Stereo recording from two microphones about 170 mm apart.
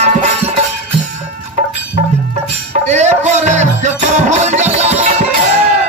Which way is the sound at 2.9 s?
40° right (ahead or behind).